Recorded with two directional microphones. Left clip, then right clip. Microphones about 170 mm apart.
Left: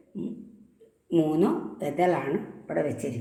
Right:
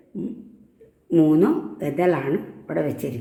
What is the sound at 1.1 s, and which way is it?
Speech, 65° right (ahead or behind).